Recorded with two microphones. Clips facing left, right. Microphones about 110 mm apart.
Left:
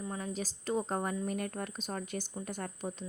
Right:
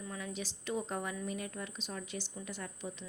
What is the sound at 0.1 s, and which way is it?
A woman's voice, 40° left (ahead or behind).